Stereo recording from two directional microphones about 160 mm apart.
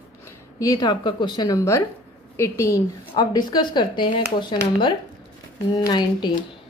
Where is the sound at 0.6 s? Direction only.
25° left (ahead or behind).